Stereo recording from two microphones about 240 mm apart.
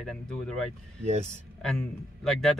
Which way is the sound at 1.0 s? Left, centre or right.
Right.